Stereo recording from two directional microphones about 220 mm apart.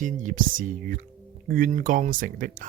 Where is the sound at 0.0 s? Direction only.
35° right (ahead or behind).